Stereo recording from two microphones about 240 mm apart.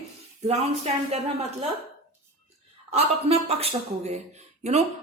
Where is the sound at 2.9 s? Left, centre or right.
Right.